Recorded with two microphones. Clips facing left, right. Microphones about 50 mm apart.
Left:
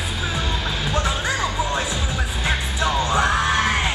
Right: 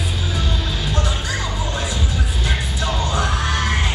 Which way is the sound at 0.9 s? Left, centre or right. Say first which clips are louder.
Left 3 dB; left.